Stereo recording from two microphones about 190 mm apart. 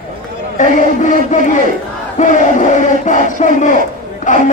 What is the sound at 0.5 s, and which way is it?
Speech, 40° left (ahead or behind).